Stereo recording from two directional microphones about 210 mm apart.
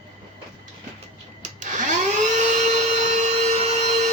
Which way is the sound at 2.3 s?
35° right (ahead or behind).